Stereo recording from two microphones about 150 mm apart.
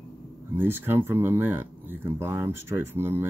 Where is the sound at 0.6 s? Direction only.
15° right (ahead or behind).